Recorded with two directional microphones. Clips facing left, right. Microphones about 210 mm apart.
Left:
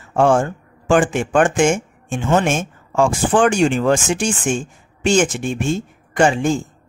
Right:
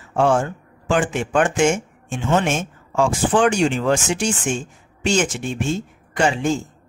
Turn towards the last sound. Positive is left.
turn(degrees=50)  # may be behind; listen again after turning